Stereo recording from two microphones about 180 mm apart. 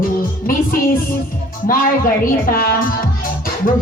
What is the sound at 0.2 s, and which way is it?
Music, 50° left (ahead or behind).